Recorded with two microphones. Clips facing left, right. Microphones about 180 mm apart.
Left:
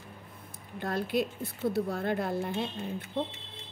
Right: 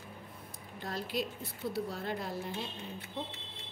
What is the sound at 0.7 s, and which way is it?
A woman's voice, 55° left (ahead or behind).